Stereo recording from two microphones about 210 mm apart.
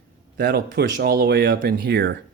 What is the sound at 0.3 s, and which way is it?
Speech, 50° right (ahead or behind).